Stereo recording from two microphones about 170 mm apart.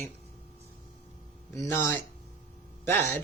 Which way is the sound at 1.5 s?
15° left (ahead or behind).